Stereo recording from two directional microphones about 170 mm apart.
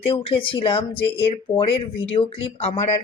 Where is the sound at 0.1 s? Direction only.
30° left (ahead or behind).